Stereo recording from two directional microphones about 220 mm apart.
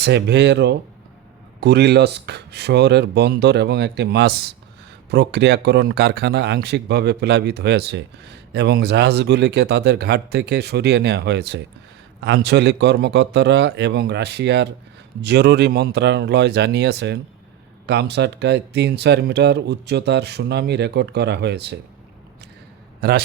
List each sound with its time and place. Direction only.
0.0 s speech: 50° right (ahead or behind)
23.0 s a man's voice: 45° right (ahead or behind)